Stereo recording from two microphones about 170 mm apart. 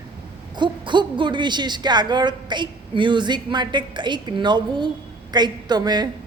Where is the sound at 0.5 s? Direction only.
30° right (ahead or behind).